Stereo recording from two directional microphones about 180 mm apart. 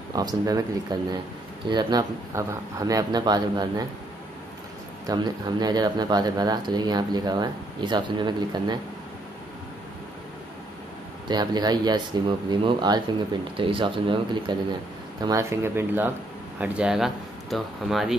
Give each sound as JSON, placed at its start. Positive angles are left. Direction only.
{"t": 0.1, "sound": "speech", "side_deg": -20}
{"t": 5.0, "sound": "speech", "side_deg": -20}
{"t": 11.2, "sound": "speech", "side_deg": -25}
{"t": 15.2, "sound": "speech", "side_deg": -15}